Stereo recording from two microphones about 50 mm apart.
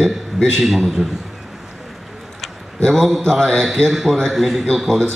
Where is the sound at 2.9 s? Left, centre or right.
Centre.